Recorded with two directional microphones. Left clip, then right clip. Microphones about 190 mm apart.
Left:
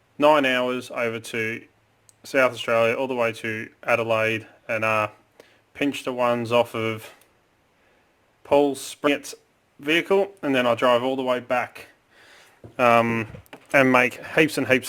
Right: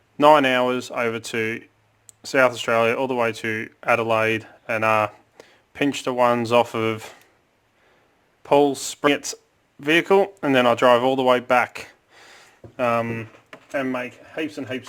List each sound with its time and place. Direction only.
0.2 s speech: 25° right (ahead or behind)
8.4 s speech: 25° right (ahead or behind)
12.7 s speech: 25° left (ahead or behind)
13.7 s speech: 60° left (ahead or behind)